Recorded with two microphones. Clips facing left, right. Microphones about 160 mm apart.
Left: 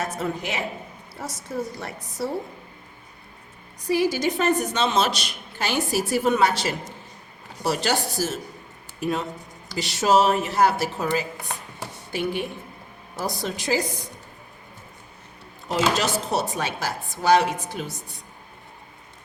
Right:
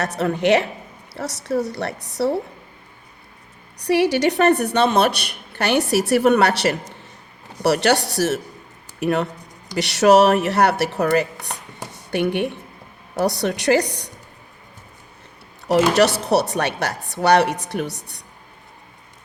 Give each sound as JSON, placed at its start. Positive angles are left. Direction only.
{"t": 0.0, "sound": "a woman's voice", "side_deg": -70}
{"t": 3.8, "sound": "a woman's voice", "side_deg": -70}
{"t": 15.9, "sound": "a woman's voice", "side_deg": -70}